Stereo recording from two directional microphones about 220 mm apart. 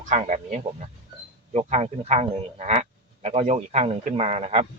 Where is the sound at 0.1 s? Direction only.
35° right (ahead or behind).